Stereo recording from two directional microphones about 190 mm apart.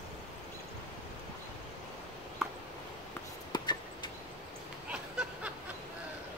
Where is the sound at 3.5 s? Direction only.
20° left (ahead or behind).